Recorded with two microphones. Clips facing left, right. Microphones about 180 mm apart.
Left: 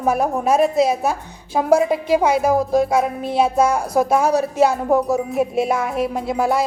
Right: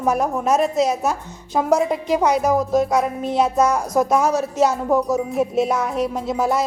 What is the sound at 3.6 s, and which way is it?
Speech, 30° left (ahead or behind).